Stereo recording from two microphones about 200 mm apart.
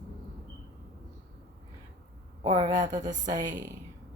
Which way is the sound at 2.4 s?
20° right (ahead or behind).